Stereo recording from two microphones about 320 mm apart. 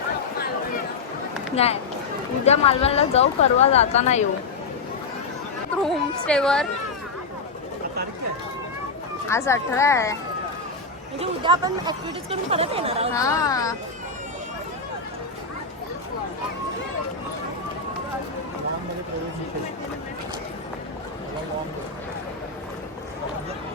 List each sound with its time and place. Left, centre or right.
1.5 s speech: centre
5.7 s a woman's voice: centre
9.2 s speech: centre
11.2 s speech: centre
13.1 s speech: centre